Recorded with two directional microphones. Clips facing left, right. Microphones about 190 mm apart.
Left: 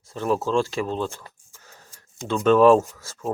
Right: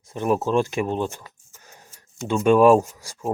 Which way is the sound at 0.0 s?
15° right (ahead or behind).